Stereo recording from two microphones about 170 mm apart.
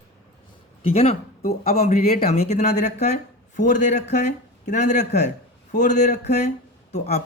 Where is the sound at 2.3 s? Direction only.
40° left (ahead or behind).